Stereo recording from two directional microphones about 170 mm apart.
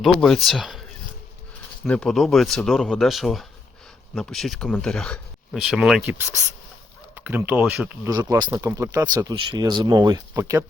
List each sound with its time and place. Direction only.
0.0 s speech: centre (ahead or behind); by 10.6 s 15° right (ahead or behind)